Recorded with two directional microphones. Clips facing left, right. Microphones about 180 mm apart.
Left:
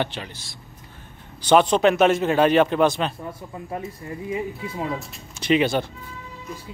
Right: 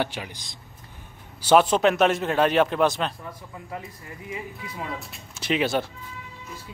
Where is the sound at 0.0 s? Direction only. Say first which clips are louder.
Left 1 dB; 10° right (ahead or behind).